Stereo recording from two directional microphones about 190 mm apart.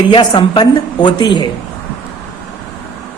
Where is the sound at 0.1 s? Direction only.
25° left (ahead or behind).